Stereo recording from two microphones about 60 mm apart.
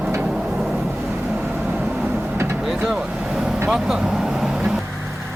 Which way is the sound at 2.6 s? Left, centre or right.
Centre.